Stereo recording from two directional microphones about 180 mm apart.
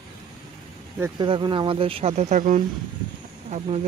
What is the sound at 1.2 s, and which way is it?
Speech, 25° right (ahead or behind).